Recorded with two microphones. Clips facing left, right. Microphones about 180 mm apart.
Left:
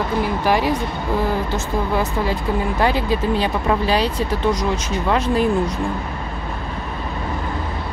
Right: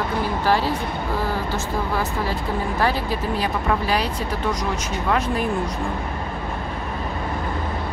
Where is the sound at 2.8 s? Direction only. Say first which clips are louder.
Left 5 dB; 20° left (ahead or behind).